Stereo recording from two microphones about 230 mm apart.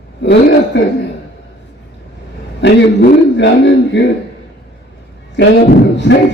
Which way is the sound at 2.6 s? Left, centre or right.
Left.